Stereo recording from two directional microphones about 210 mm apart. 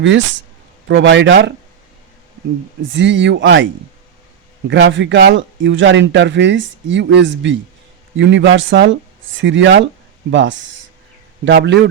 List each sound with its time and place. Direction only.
0.9 s speech: 60° right (ahead or behind)
2.9 s speech: 60° right (ahead or behind)
4.7 s speech: 60° right (ahead or behind)
11.4 s speech: 55° right (ahead or behind)